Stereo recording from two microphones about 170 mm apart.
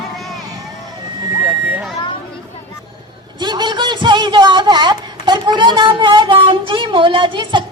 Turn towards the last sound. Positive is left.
turn(degrees=-30)  # may be behind; listen again after turning